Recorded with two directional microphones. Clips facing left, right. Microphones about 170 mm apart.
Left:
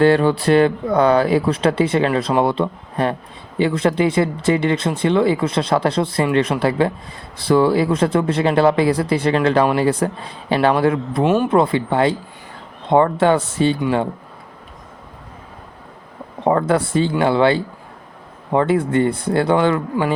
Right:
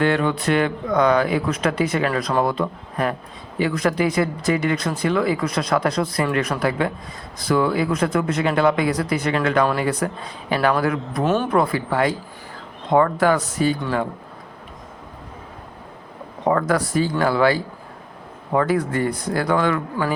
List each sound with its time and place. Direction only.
0.0 s speech: 35° left (ahead or behind)
11.2 s speech: 5° left (ahead or behind)
11.4 s speech: 25° left (ahead or behind)
16.4 s speech: 30° left (ahead or behind)